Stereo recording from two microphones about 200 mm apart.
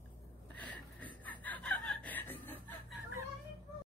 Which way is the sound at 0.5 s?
5° left (ahead or behind).